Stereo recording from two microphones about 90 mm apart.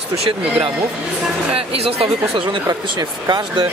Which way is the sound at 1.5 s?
90° right.